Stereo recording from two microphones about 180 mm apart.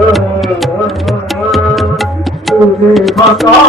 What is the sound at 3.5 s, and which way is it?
Music, 20° left (ahead or behind).